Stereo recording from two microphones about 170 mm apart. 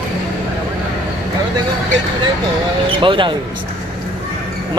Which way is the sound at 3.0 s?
30° right (ahead or behind).